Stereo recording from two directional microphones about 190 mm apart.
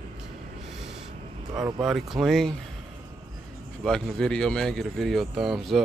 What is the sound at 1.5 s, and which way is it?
Speech, 20° right (ahead or behind).